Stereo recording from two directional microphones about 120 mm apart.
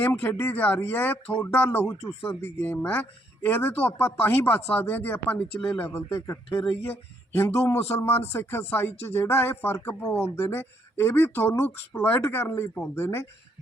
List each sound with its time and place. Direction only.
0.0 s speech: 20° left (ahead or behind)